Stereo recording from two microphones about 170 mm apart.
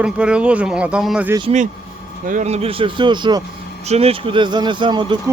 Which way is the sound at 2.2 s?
45° right (ahead or behind).